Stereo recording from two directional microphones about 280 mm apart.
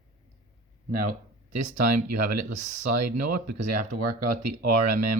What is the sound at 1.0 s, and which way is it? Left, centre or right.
Speech, right.